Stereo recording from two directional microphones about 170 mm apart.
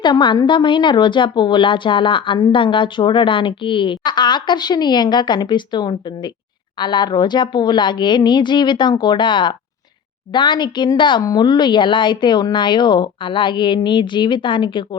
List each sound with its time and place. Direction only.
0.0 s a woman's voice: 25° left (ahead or behind)